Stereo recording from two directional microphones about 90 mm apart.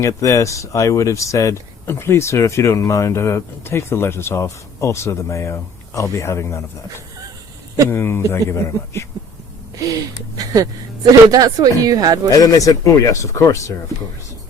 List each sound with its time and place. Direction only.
0.0 s speech: 35° left (ahead or behind)
7.9 s a man's voice: 25° left (ahead or behind)
10.3 s a woman's voice: 40° right (ahead or behind)
12.3 s speech: 40° left (ahead or behind)